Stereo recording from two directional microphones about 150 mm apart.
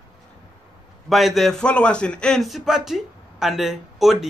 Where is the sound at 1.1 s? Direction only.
Centre (ahead or behind).